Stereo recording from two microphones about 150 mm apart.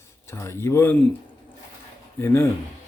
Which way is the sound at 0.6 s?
15° left (ahead or behind).